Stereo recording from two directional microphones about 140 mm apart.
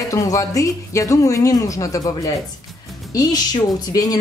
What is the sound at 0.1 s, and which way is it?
A woman's voice, 25° left (ahead or behind).